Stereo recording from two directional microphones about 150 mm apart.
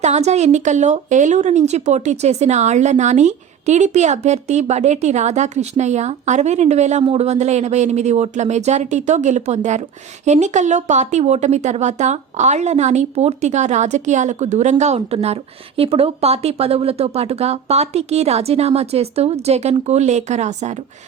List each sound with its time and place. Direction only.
0.0 s speech: 50° right (ahead or behind)